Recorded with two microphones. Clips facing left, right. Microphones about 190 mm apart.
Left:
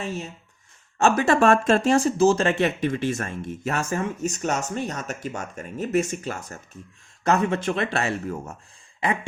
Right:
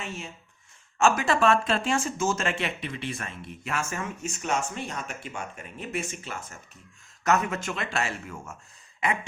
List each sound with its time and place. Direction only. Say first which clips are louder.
0.0 s speech: left 6 dB; 35° left (ahead or behind)
7.3 s speech: left 4 dB; 30° left (ahead or behind)